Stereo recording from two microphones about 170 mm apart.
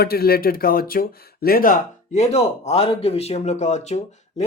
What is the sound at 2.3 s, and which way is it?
Speech, 35° left (ahead or behind).